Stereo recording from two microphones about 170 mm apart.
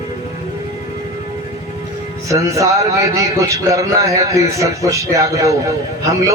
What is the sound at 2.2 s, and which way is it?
A man's voice, 20° right (ahead or behind).